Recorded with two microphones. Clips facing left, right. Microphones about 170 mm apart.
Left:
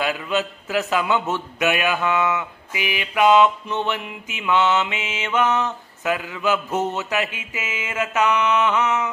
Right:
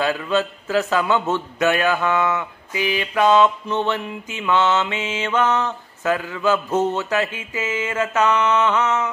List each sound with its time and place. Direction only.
0.0 s mantra: 15° left (ahead or behind)